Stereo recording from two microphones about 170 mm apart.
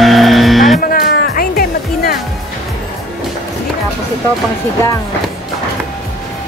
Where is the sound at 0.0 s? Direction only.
Centre (ahead or behind).